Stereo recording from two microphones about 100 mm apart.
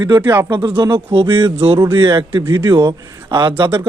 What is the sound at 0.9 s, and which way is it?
Speech, 55° right (ahead or behind).